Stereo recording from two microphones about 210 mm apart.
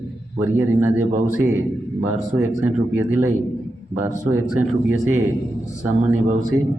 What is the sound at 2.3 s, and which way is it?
Speech, 10° right (ahead or behind).